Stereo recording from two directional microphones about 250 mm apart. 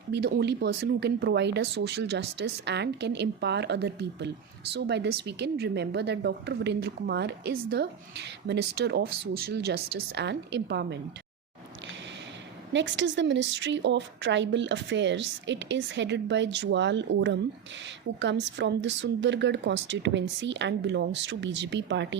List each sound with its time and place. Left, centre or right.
0.1 s a woman's voice: right
10.1 s a woman's voice: right
12.7 s a woman's voice: right